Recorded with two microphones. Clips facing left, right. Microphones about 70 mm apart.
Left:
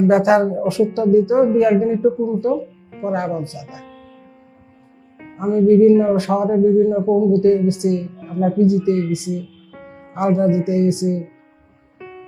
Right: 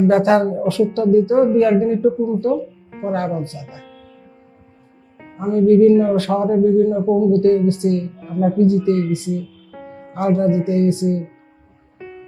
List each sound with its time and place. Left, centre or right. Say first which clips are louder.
0.1 s speech: even; centre
5.4 s speech: even; left